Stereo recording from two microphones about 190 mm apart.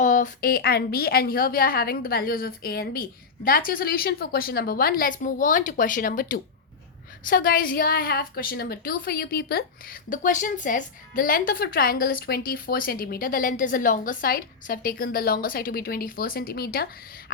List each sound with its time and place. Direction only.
0.0 s a woman's voice: 40° left (ahead or behind)